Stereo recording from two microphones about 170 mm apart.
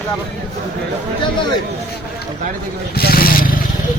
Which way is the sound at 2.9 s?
65° left (ahead or behind).